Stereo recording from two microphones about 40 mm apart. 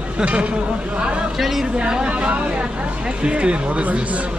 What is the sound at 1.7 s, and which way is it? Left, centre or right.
Speech, right.